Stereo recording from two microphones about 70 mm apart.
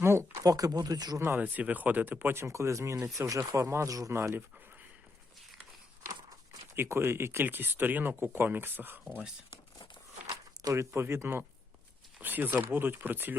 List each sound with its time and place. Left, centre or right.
0.0 s a sound: right
0.4 s speech: right
1.4 s speech: right
4.1 s speech: right
6.7 s speech: right
10.2 s a sound: right
10.8 s speech: right